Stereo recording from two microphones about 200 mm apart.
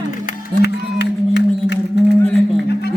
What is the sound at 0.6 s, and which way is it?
Music, 60° left (ahead or behind).